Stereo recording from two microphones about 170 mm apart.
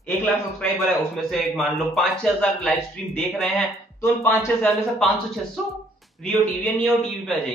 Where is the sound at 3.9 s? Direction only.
15° left (ahead or behind).